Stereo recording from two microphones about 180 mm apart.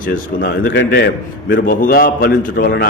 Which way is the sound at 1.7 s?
55° left (ahead or behind).